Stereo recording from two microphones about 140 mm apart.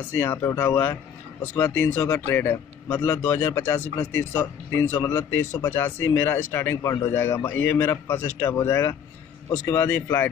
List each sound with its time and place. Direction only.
0.2 s speech: 20° left (ahead or behind)